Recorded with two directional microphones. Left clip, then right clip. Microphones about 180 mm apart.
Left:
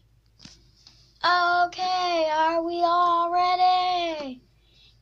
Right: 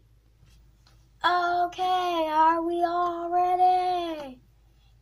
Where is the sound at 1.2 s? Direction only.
5° right (ahead or behind).